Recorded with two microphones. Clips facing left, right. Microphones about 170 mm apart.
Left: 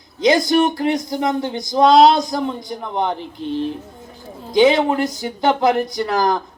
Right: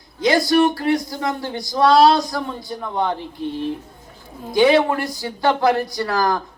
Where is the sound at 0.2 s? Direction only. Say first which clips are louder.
Left 1 dB; 20° left (ahead or behind).